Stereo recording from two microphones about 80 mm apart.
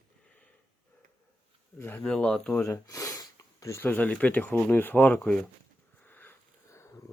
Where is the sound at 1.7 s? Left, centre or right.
Left.